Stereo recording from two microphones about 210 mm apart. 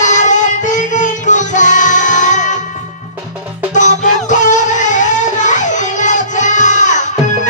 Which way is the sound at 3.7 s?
35° left (ahead or behind).